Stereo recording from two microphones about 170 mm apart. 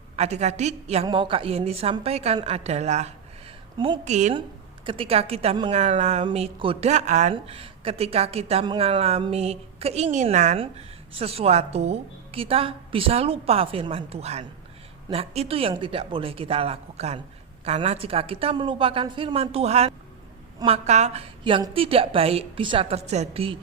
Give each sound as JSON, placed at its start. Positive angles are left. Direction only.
{"t": 0.2, "sound": "speech", "side_deg": -40}
{"t": 1.0, "sound": "speech", "side_deg": -30}
{"t": 3.8, "sound": "a woman's voice", "side_deg": -25}
{"t": 4.0, "sound": "a woman's voice", "side_deg": -45}
{"t": 4.9, "sound": "speech", "side_deg": -35}